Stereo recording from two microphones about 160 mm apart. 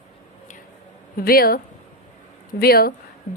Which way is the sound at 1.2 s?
65° left (ahead or behind).